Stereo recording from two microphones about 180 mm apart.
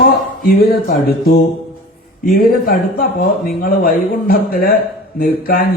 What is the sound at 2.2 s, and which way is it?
Speech, 55° left (ahead or behind).